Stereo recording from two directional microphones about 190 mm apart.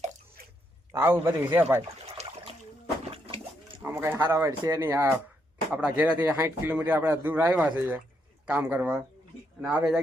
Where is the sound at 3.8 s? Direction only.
10° right (ahead or behind).